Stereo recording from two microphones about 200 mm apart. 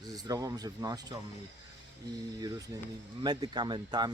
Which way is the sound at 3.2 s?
20° right (ahead or behind).